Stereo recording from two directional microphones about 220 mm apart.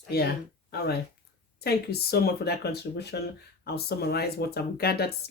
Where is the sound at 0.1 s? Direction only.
45° left (ahead or behind).